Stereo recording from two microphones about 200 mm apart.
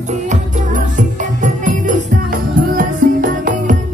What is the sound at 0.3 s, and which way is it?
Music, 40° right (ahead or behind).